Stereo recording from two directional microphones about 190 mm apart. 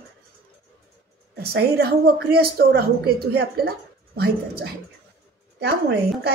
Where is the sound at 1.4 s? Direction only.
55° right (ahead or behind).